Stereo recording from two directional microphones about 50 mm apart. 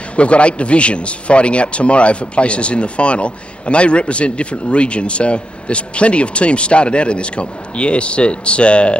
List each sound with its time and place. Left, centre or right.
0.2 s a man's voice: left